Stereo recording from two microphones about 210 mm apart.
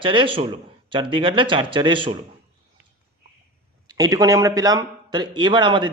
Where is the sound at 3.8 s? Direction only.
15° right (ahead or behind).